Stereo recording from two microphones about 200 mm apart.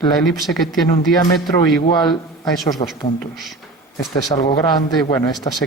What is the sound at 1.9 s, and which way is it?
A man's voice, 20° left (ahead or behind).